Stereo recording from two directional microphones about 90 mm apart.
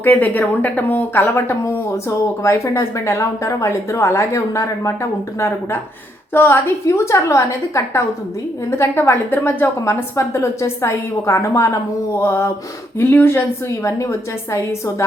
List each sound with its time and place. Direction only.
0.0 s speech: 20° left (ahead or behind); by 4.9 s 35° left (ahead or behind)
6.3 s speech: 25° left (ahead or behind)